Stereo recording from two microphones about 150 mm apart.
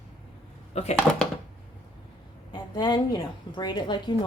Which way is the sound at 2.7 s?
30° left (ahead or behind).